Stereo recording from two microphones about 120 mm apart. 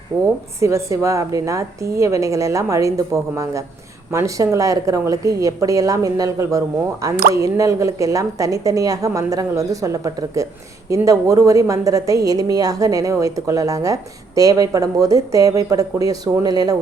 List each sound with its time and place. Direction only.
0.1 s a woman's voice: 20° right (ahead or behind)